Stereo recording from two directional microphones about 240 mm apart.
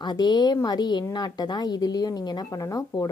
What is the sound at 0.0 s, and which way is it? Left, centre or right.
A woman's voice, centre.